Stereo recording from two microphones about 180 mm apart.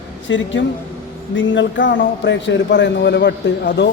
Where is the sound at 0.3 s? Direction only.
90° left.